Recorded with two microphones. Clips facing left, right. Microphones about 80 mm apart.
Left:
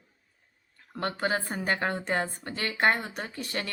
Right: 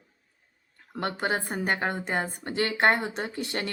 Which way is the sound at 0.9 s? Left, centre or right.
Right.